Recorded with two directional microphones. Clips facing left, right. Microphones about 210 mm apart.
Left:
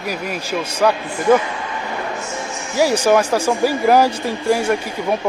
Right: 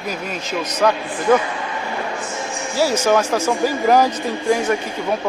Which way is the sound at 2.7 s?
15° left (ahead or behind).